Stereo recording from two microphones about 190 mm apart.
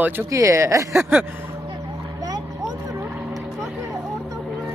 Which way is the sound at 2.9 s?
10° right (ahead or behind).